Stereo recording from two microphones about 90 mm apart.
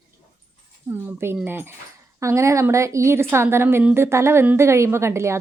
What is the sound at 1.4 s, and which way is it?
A woman's voice, 25° right (ahead or behind).